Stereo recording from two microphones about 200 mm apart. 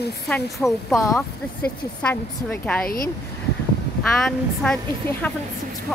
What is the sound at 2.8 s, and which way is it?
Speech, 45° left (ahead or behind).